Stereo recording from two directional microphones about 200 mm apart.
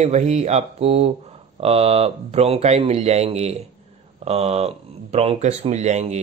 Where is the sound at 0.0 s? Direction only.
35° right (ahead or behind).